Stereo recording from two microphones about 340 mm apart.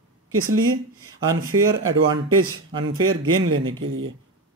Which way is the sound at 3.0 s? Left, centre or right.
Right.